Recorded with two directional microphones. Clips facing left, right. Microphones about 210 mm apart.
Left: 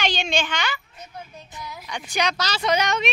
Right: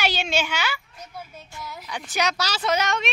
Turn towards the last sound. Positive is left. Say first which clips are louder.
# left 2 dB
turn(degrees=0)  # may be behind; listen again after turning